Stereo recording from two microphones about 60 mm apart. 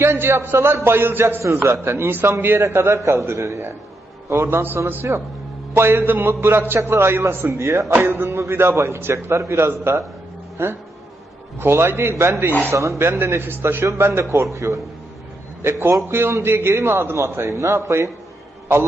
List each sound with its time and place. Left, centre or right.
0.0 s a man's voice: right
5.1 s a man's voice: right
7.9 s a man's voice: right
9.1 s a man's voice: right